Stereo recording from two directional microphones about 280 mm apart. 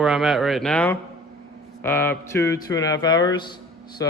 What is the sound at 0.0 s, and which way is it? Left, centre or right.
Speech, centre.